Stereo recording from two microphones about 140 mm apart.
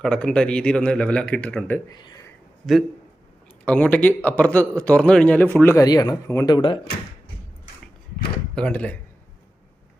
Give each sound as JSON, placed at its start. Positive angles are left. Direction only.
{"t": 0.0, "sound": "a man's voice", "side_deg": 5}
{"t": 1.9, "sound": "speech", "side_deg": 30}
{"t": 3.7, "sound": "a man's voice", "side_deg": 10}
{"t": 5.8, "sound": "speech", "side_deg": 30}
{"t": 8.5, "sound": "a man's voice", "side_deg": 10}